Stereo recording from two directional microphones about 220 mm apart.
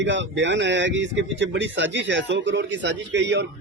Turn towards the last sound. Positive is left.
turn(degrees=-55)  # may be behind; listen again after turning